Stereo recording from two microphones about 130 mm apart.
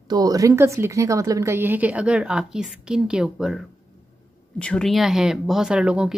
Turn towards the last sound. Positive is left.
turn(degrees=-5)  # may be behind; listen again after turning